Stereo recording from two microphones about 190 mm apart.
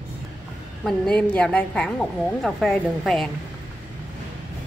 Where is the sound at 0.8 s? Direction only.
5° left (ahead or behind).